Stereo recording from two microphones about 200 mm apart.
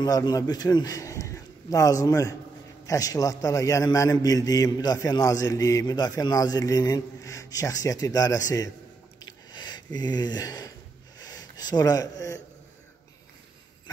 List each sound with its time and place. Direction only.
0.0 s a man's voice: 20° left (ahead or behind)
9.2 s a sound: 20° left (ahead or behind)
11.1 s speech: 20° left (ahead or behind)